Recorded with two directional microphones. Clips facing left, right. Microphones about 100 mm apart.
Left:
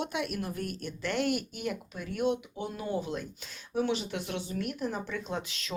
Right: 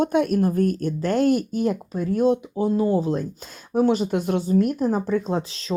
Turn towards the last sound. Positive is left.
turn(degrees=-35)  # may be behind; listen again after turning